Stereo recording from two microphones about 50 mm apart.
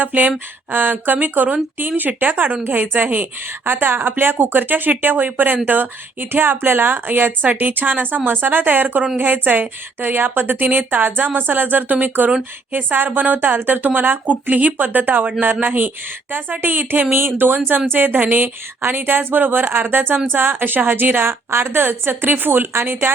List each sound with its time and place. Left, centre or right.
0.0 s a woman's voice: right
14.3 s a woman's voice: right